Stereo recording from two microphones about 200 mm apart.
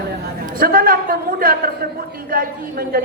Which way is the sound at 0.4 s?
45° right (ahead or behind).